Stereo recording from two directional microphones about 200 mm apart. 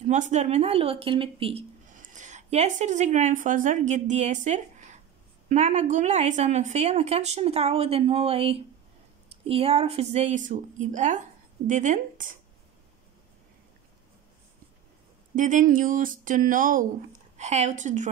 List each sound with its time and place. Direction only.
0.0 s a woman's voice: 35° right (ahead or behind)
2.0 s a woman's voice: 40° right (ahead or behind)
15.3 s a woman's voice: 40° right (ahead or behind)